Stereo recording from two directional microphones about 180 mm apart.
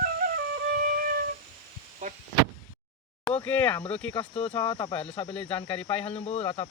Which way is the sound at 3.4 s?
10° left (ahead or behind).